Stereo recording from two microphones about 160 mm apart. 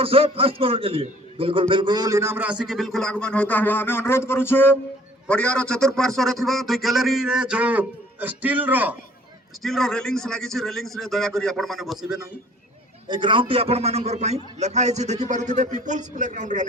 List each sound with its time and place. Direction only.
0.0 s a man's voice: 35° right (ahead or behind); by 9.0 s 10° right (ahead or behind)
9.6 s a man's voice: 5° left (ahead or behind)
13.1 s a man's voice: 30° right (ahead or behind); by 16.6 s 50° right (ahead or behind)